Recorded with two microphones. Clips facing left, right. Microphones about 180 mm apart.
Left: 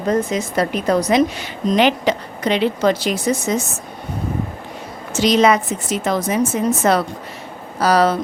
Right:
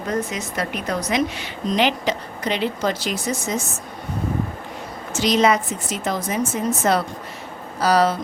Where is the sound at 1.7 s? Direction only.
60° left (ahead or behind).